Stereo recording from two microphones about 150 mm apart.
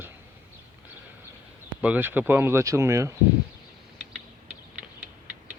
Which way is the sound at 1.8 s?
10° right (ahead or behind).